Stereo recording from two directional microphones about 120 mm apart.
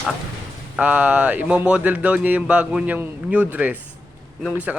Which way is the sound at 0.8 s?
10° right (ahead or behind).